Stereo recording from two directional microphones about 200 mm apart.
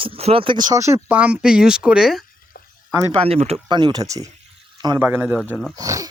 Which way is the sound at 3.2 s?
30° right (ahead or behind).